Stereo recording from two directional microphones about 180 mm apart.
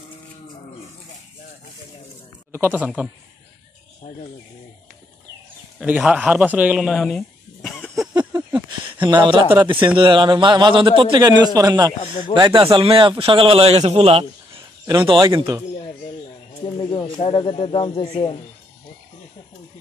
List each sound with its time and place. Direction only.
2.5 s a woman's voice: 10° right (ahead or behind)
5.8 s speech: 5° right (ahead or behind)
8.1 s a sound: 20° right (ahead or behind)
8.4 s a sound: 10° right (ahead or behind)
9.0 s a man's voice: 25° right (ahead or behind)
16.9 s speech: 30° left (ahead or behind)